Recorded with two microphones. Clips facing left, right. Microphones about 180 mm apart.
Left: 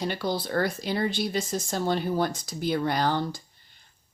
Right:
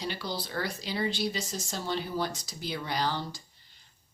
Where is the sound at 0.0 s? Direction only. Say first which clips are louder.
Left 7 dB; 50° left (ahead or behind).